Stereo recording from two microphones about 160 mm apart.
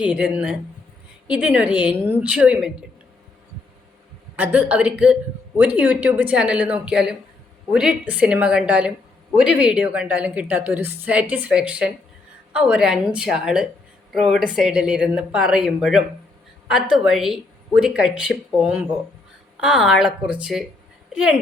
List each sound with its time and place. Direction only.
0.0 s a woman's voice: 5° right (ahead or behind)
4.4 s a woman's voice: 10° right (ahead or behind)